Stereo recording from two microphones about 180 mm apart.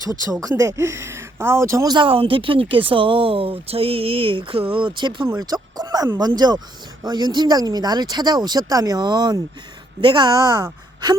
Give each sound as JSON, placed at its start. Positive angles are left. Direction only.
{"t": 0.4, "sound": "speech", "side_deg": -20}